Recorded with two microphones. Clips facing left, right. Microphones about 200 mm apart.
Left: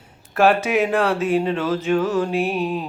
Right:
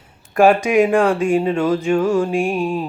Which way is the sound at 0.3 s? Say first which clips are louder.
Right 4 dB; 15° right (ahead or behind).